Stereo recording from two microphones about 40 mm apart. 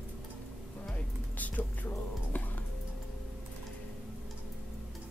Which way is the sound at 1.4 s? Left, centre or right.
Left.